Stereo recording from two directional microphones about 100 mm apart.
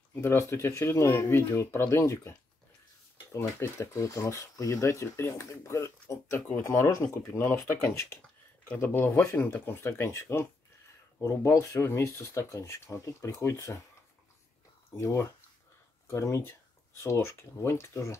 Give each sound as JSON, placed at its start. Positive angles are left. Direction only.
{"t": 0.1, "sound": "speech", "side_deg": 25}
{"t": 3.3, "sound": "speech", "side_deg": 20}
{"t": 15.0, "sound": "speech", "side_deg": 30}